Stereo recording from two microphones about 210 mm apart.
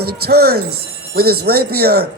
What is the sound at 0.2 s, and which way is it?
A man's voice, 50° right (ahead or behind).